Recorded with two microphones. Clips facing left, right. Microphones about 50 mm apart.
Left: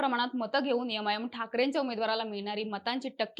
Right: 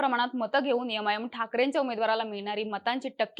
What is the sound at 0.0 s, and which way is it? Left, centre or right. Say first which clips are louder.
A woman's voice: right 3 dB; centre.